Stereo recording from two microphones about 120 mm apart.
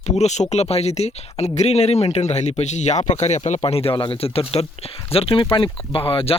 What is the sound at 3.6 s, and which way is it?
Speech, 55° left (ahead or behind).